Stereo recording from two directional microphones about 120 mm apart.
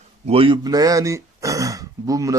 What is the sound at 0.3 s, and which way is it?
Speech, 50° right (ahead or behind).